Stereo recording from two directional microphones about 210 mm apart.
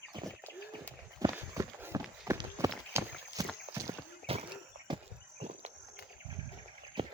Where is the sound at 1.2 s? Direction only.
15° right (ahead or behind).